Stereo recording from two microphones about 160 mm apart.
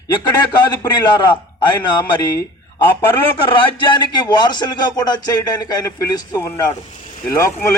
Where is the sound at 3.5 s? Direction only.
30° left (ahead or behind).